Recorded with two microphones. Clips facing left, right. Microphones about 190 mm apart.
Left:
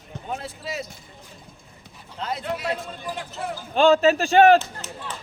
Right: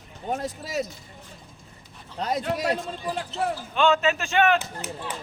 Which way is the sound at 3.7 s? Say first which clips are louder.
Left 6 dB; 35° left (ahead or behind).